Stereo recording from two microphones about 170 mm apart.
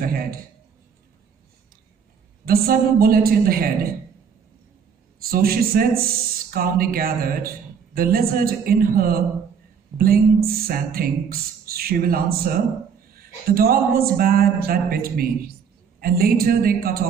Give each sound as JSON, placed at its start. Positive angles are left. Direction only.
{"t": 0.0, "sound": "a woman's voice", "side_deg": -60}
{"t": 2.4, "sound": "a woman's voice", "side_deg": -60}
{"t": 5.2, "sound": "a woman's voice", "side_deg": -60}